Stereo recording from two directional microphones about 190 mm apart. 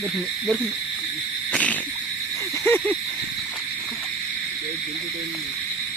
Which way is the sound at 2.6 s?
10° left (ahead or behind).